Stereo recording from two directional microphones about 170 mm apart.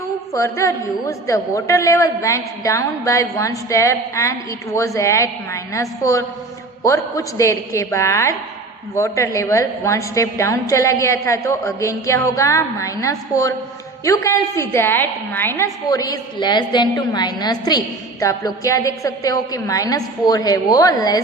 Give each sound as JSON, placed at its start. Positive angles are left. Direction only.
{"t": 0.3, "sound": "a woman's voice", "side_deg": 15}